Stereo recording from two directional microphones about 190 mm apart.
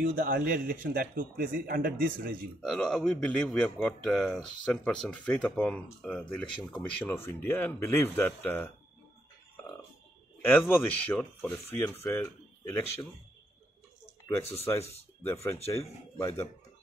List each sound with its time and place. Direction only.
0.0 s a man's voice: 50° right (ahead or behind)
2.6 s a man's voice: 5° left (ahead or behind)
10.4 s speech: 10° left (ahead or behind)
14.6 s speech: 15° left (ahead or behind)
15.6 s speech: 30° left (ahead or behind)
16.2 s speech: 10° left (ahead or behind)